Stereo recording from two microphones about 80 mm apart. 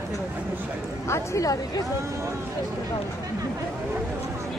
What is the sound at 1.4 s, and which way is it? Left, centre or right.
Speech, left.